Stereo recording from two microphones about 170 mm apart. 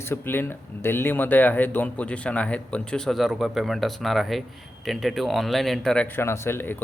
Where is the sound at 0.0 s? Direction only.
15° left (ahead or behind).